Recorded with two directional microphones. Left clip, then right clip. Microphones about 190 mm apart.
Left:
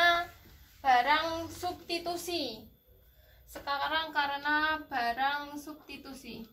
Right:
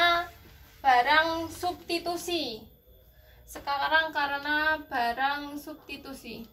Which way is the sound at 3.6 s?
10° left (ahead or behind).